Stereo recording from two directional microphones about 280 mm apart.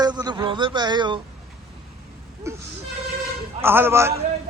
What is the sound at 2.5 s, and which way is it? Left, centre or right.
Speech, centre.